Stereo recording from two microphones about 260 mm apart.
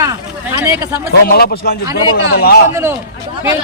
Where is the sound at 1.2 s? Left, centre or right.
Left.